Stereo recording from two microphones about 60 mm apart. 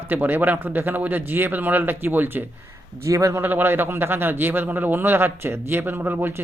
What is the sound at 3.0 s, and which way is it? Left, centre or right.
Speech, right.